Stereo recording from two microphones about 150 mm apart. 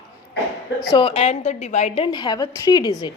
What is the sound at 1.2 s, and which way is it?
Speech, 45° left (ahead or behind).